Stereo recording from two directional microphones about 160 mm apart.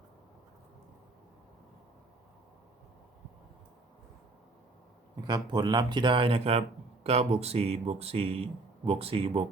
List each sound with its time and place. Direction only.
5.2 s speech: 25° right (ahead or behind)